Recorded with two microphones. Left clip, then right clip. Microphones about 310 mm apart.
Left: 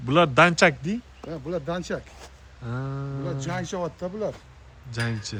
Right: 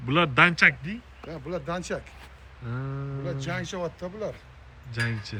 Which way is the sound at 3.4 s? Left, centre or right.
Left.